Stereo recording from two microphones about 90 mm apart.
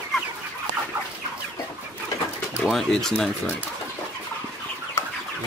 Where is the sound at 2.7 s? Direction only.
5° left (ahead or behind).